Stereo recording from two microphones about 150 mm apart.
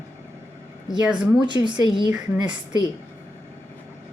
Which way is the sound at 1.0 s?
5° right (ahead or behind).